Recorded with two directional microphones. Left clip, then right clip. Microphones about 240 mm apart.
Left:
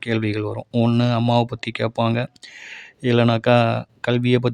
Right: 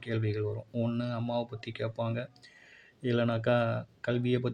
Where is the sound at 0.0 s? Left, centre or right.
Left.